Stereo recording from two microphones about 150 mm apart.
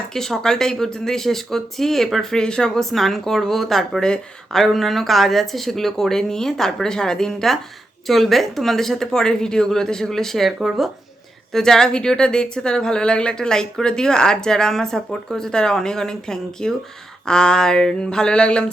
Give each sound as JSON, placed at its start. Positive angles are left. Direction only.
{"t": 0.1, "sound": "speech", "side_deg": 5}